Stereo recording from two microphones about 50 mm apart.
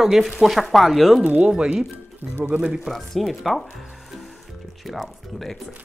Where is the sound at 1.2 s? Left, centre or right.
Right.